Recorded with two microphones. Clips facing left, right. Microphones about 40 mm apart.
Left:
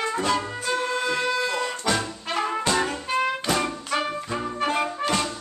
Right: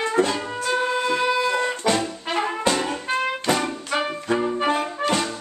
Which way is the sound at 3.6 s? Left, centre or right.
Centre.